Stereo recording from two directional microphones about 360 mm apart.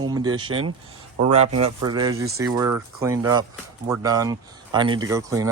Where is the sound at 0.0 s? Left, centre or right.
Centre.